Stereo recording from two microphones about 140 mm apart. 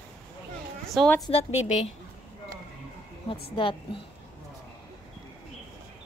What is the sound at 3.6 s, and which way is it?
Speech, 35° left (ahead or behind).